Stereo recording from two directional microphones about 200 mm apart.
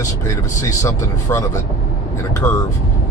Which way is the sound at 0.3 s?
15° left (ahead or behind).